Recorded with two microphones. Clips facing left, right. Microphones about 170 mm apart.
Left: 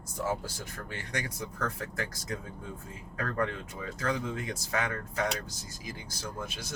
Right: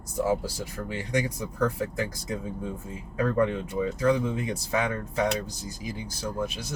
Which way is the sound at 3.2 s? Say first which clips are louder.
Right 8 dB; 15° right (ahead or behind).